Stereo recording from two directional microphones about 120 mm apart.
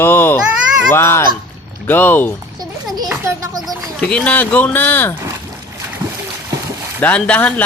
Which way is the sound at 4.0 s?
10° left (ahead or behind).